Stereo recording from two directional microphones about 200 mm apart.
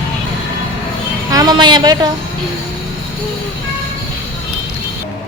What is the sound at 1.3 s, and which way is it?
Speech, 20° right (ahead or behind).